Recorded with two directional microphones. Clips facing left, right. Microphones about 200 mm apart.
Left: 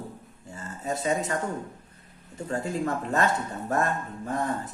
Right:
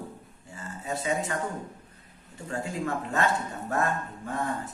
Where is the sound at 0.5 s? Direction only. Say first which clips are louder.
Left 2 dB; 40° left (ahead or behind).